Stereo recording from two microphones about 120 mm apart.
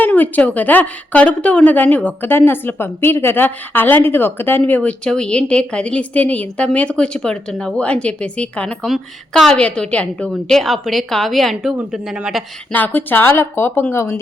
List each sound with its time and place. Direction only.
0.0 s a woman's voice: 15° left (ahead or behind); by 12.4 s 5° right (ahead or behind)
12.7 s a woman's voice: 15° left (ahead or behind)